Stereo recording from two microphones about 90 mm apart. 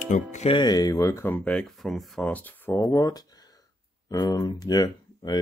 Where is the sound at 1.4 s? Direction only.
5° left (ahead or behind).